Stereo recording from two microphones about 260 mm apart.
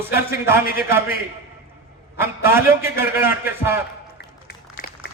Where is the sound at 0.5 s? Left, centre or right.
Left.